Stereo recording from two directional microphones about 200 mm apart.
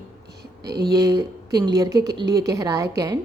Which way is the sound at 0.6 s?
55° right (ahead or behind).